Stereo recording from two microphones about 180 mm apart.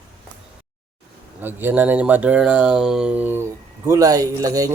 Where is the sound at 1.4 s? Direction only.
10° right (ahead or behind).